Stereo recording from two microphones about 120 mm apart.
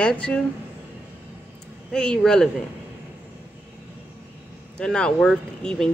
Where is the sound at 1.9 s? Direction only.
5° left (ahead or behind).